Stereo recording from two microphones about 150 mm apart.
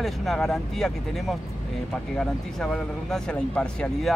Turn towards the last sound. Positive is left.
turn(degrees=5)  # may be behind; listen again after turning